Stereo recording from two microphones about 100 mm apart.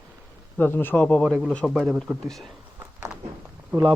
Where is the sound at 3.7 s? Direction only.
15° right (ahead or behind).